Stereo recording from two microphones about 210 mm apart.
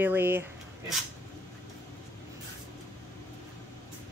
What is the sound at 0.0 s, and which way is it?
Speech, 10° right (ahead or behind).